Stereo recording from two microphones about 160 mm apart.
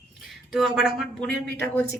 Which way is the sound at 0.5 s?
5° right (ahead or behind).